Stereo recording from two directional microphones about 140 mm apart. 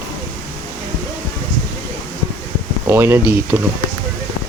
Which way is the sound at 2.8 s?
15° right (ahead or behind).